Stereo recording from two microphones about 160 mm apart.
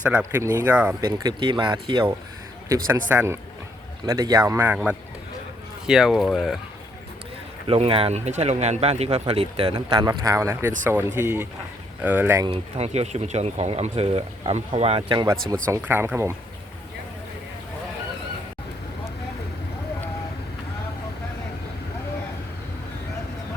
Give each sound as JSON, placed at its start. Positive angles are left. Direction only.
{"t": 0.0, "sound": "speech", "side_deg": -10}
{"t": 1.0, "sound": "speech", "side_deg": -25}
{"t": 4.0, "sound": "speech", "side_deg": -25}
{"t": 7.7, "sound": "speech", "side_deg": -35}
{"t": 12.5, "sound": "speech", "side_deg": -40}
{"t": 15.7, "sound": "speech", "side_deg": -15}